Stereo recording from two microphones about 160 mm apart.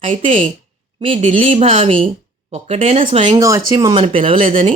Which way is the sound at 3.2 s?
20° right (ahead or behind).